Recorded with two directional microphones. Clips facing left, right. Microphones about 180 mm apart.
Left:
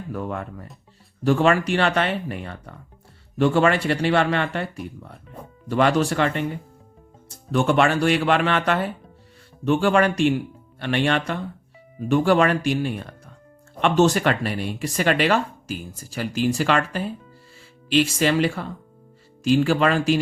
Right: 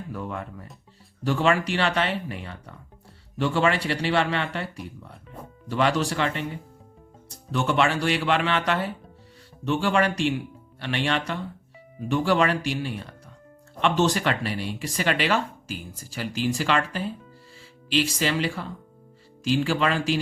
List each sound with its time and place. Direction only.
0.1 s speech: 50° left (ahead or behind)
7.5 s speech: 50° left (ahead or behind)